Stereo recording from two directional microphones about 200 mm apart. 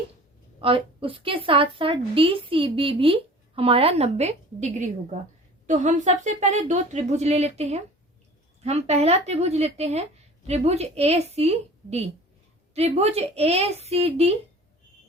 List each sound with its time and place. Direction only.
0.6 s a woman's voice: 25° right (ahead or behind)